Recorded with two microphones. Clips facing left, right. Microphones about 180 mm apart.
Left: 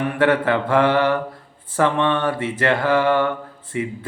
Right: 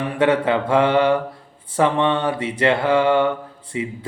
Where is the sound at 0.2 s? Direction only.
20° right (ahead or behind).